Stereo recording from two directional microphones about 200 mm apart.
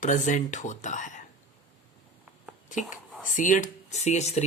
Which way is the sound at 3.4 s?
40° left (ahead or behind).